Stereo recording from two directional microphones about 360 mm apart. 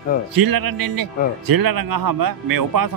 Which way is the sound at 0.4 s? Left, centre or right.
Right.